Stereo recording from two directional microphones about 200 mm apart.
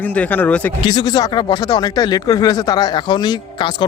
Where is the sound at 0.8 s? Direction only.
20° left (ahead or behind).